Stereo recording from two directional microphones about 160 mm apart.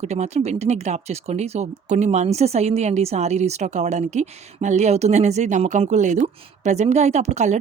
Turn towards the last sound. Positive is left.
turn(degrees=-45)  # may be behind; listen again after turning